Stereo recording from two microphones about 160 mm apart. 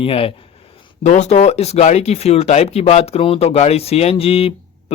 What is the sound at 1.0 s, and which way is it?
Speech, 50° left (ahead or behind).